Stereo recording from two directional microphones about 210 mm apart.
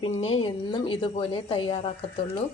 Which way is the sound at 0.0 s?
25° left (ahead or behind).